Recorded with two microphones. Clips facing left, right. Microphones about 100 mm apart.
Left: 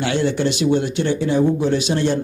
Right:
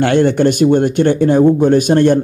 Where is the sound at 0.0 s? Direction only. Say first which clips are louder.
Right 8 dB; 55° right (ahead or behind).